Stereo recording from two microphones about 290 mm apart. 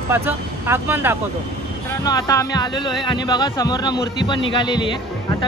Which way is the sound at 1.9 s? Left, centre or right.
Centre.